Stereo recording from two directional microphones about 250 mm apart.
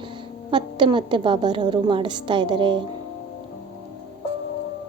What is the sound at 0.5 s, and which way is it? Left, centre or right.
A woman's voice, centre.